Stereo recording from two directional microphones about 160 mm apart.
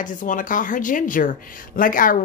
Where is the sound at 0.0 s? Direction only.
55° left (ahead or behind).